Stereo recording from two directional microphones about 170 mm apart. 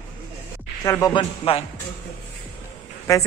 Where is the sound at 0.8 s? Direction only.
15° left (ahead or behind).